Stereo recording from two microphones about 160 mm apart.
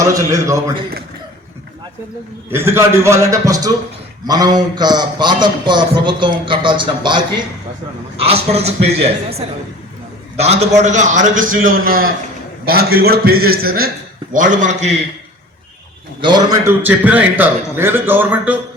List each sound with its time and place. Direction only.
0.0 s a man's voice: 20° right (ahead or behind)
2.5 s a man's voice: 15° right (ahead or behind)
8.3 s a man's voice: 40° right (ahead or behind)
10.3 s a man's voice: 40° right (ahead or behind); by 12.1 s 65° right (ahead or behind)
12.6 s a man's voice: 75° right (ahead or behind)
14.3 s a man's voice: 50° right (ahead or behind)
16.2 s a man's voice: 25° right (ahead or behind)
16.8 s a man's voice: 10° right (ahead or behind)